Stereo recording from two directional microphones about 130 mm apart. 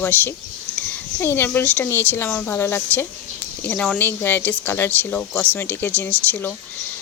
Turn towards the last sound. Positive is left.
turn(degrees=15)  # may be behind; listen again after turning